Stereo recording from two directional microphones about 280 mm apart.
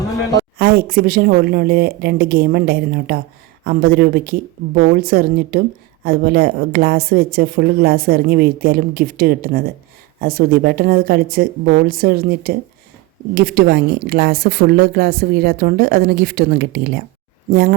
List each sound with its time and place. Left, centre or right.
0.3 s a woman's voice: right